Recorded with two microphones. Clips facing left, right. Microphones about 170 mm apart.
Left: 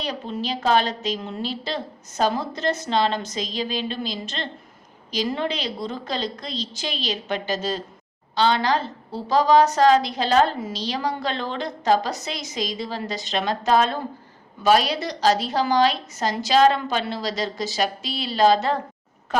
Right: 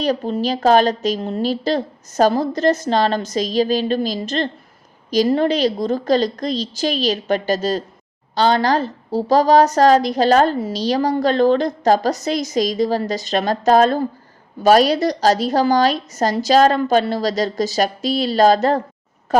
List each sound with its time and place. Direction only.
0.0 s a woman's voice: 40° right (ahead or behind)